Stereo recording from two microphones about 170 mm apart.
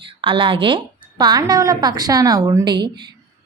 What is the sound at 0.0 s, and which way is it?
A woman's voice, 30° right (ahead or behind).